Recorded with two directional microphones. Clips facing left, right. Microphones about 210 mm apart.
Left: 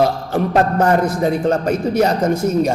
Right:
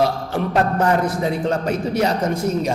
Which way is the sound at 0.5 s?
45° left (ahead or behind).